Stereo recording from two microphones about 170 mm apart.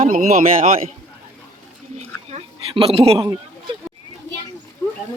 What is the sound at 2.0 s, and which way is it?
Speech, 40° right (ahead or behind).